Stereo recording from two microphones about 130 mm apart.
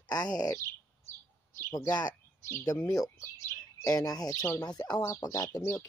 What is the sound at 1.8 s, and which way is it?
Speech, 30° left (ahead or behind).